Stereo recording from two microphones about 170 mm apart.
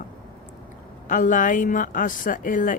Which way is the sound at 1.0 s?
50° left (ahead or behind).